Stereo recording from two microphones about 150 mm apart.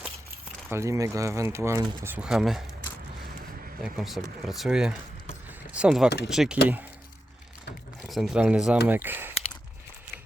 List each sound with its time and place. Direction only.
0.7 s speech: 20° right (ahead or behind)
2.0 s speech: 10° right (ahead or behind)
3.8 s speech: 5° right (ahead or behind)
8.0 s speech: centre (ahead or behind)